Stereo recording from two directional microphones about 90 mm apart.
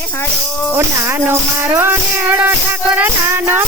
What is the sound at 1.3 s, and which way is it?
Music, 25° right (ahead or behind).